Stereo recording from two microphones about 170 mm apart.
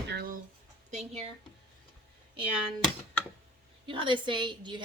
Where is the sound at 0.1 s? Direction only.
65° right (ahead or behind).